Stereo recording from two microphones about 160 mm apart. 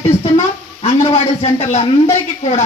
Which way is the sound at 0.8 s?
40° left (ahead or behind).